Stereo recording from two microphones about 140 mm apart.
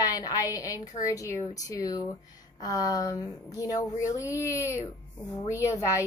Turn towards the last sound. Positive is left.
turn(degrees=20)  # may be behind; listen again after turning